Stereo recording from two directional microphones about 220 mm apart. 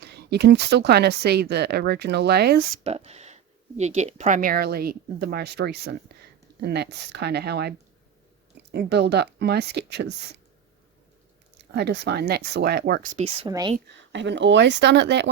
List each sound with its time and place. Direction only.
0.0 s speech: 50° right (ahead or behind)
2.8 s speech: 30° right (ahead or behind); by 7.7 s 50° right (ahead or behind)
8.7 s speech: 50° right (ahead or behind)
11.5 s speech: 50° right (ahead or behind)
13.1 s speech: 25° right (ahead or behind)
14.1 s speech: 55° right (ahead or behind)